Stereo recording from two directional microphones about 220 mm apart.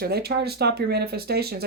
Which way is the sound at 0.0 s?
45° right (ahead or behind).